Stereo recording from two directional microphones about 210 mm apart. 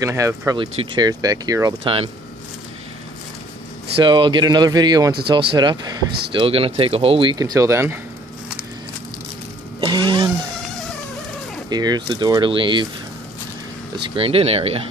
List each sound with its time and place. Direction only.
0.0 s speech: 15° right (ahead or behind)
4.0 s speech: 20° right (ahead or behind)
9.8 s a sound: 20° right (ahead or behind)
11.7 s speech: 20° right (ahead or behind)
14.1 s speech: 25° right (ahead or behind)